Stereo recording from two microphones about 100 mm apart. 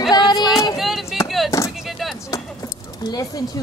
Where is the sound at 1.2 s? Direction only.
Centre (ahead or behind).